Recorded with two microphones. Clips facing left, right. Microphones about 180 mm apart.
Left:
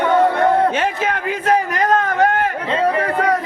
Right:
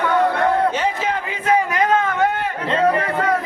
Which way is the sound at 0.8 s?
55° left (ahead or behind).